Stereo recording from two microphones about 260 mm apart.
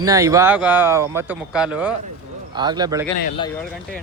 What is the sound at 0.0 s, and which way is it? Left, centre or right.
Speech, centre.